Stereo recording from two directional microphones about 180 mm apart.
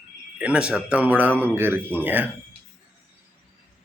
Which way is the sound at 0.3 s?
5° right (ahead or behind).